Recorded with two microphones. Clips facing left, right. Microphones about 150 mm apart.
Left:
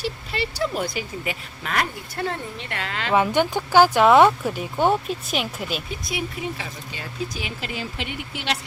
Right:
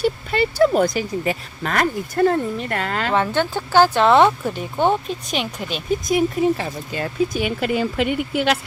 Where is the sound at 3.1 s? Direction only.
10° left (ahead or behind).